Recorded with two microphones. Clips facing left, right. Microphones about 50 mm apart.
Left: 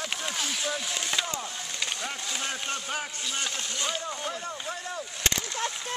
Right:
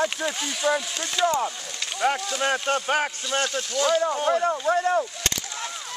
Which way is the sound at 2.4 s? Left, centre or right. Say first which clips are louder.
Right 12 dB; right.